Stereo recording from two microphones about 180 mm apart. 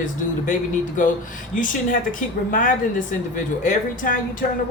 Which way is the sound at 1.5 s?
50° left (ahead or behind).